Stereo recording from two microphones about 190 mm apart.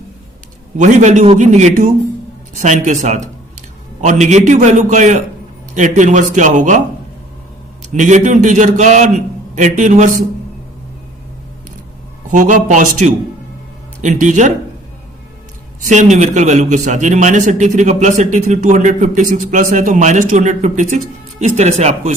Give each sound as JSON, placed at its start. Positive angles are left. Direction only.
{"t": 0.8, "sound": "a man's voice", "side_deg": -40}
{"t": 7.9, "sound": "a man's voice", "side_deg": -40}
{"t": 12.3, "sound": "a man's voice", "side_deg": -40}
{"t": 15.9, "sound": "a man's voice", "side_deg": -40}